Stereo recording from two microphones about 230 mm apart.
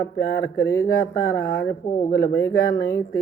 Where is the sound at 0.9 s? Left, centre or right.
Left.